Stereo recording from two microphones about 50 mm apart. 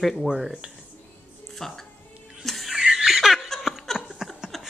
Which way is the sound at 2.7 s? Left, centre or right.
Centre.